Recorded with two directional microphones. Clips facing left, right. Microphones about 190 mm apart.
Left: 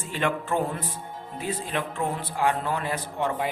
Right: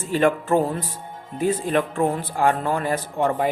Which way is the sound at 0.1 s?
40° right (ahead or behind).